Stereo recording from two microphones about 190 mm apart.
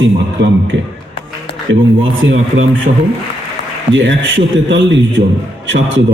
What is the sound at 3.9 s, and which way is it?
A man's voice, 80° right.